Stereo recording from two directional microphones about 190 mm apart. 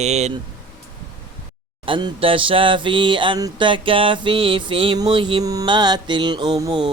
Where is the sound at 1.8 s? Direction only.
25° right (ahead or behind).